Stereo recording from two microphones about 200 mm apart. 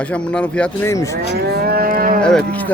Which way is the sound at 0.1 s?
5° left (ahead or behind).